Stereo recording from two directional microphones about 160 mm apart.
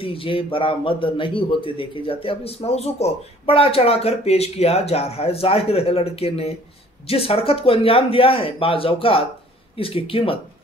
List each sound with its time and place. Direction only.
0.0 s a man's voice: 35° left (ahead or behind)